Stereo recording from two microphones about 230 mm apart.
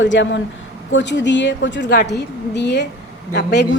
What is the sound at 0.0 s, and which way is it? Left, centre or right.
A woman's voice, left.